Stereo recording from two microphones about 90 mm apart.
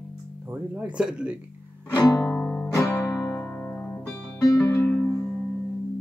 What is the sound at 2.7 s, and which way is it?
Music, 35° left (ahead or behind).